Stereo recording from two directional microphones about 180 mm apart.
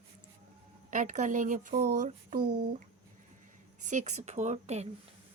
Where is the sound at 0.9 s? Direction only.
45° right (ahead or behind).